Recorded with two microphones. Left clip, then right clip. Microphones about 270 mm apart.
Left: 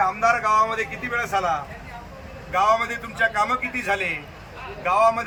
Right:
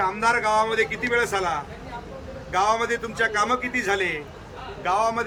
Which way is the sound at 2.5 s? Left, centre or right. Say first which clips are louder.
Left 2 dB; centre.